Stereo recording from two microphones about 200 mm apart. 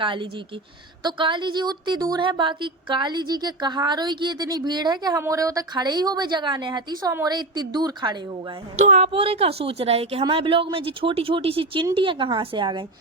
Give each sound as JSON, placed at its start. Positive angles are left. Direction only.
{"t": 0.0, "sound": "a woman's voice", "side_deg": -25}
{"t": 8.8, "sound": "a woman's voice", "side_deg": -35}